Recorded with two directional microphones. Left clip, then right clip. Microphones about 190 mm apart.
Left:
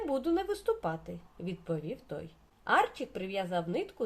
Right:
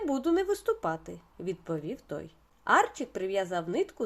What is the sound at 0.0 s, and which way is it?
Speech, 35° right (ahead or behind).